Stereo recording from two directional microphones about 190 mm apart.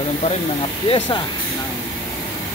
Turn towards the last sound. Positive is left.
turn(degrees=20)  # may be behind; listen again after turning